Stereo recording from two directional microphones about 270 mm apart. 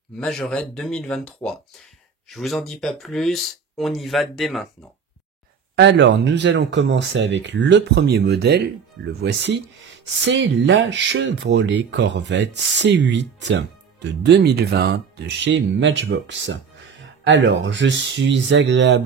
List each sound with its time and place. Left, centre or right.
0.2 s speech: centre
5.8 s speech: right